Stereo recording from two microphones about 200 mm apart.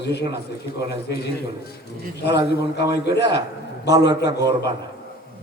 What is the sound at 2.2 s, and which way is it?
A man's voice, 55° left (ahead or behind).